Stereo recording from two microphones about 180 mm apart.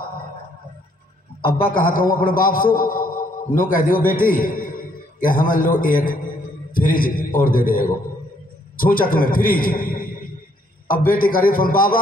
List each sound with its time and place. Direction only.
1.4 s a man's voice: 55° left (ahead or behind)